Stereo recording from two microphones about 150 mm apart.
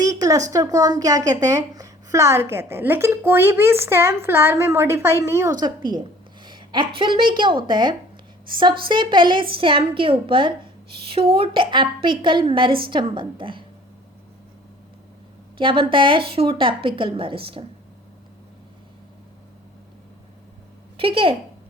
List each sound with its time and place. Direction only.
0.0 s a sound: 25° right (ahead or behind)
0.5 s a woman's voice: 25° right (ahead or behind)
15.5 s a woman's voice: 35° right (ahead or behind)
21.0 s a woman's voice: 35° right (ahead or behind)